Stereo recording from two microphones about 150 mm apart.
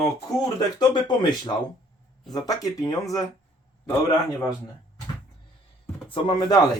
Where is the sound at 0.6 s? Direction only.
30° left (ahead or behind).